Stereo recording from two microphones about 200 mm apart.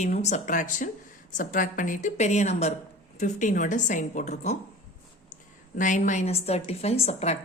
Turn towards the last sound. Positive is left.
turn(degrees=35)  # may be behind; listen again after turning